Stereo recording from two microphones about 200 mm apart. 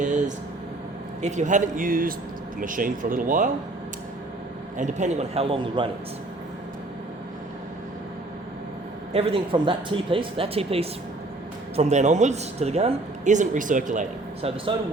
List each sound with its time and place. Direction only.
0.0 s air conditioning: 40° right (ahead or behind)
1.2 s speech: 35° right (ahead or behind)
4.8 s a man's voice: 35° right (ahead or behind)
9.1 s a man's voice: 30° right (ahead or behind)